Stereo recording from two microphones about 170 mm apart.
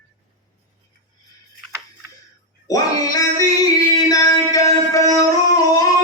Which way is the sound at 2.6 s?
20° left (ahead or behind).